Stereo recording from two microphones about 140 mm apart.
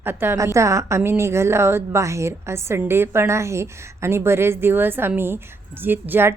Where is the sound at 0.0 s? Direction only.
15° right (ahead or behind).